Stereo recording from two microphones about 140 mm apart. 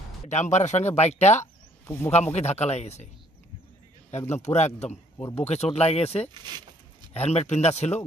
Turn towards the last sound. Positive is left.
turn(degrees=50)  # may be behind; listen again after turning